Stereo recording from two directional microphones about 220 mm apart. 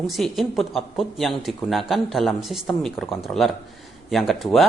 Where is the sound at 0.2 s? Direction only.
Centre (ahead or behind).